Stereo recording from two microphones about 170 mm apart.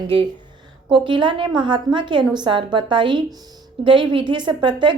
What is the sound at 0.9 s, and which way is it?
A woman's voice, 30° right (ahead or behind).